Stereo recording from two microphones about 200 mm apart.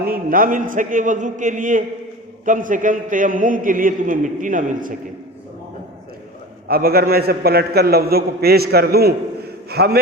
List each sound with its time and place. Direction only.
0.0 s a man's voice: 45° right (ahead or behind)
6.7 s a man's voice: 50° right (ahead or behind)